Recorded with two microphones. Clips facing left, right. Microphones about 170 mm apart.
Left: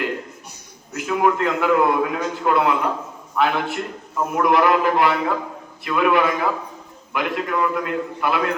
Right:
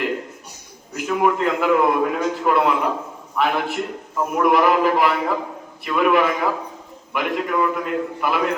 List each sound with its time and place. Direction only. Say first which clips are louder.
0.9 s a man's voice: even; centre (ahead or behind)